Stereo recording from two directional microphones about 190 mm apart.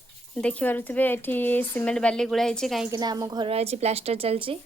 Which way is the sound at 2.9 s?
20° right (ahead or behind).